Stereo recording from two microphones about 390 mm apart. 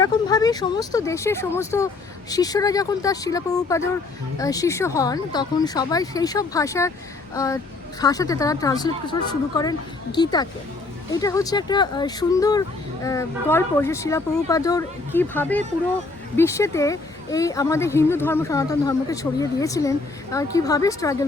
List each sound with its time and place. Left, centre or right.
0.0 s speech: centre
10.2 s speech: centre